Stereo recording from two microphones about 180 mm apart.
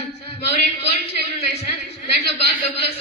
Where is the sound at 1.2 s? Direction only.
35° left (ahead or behind).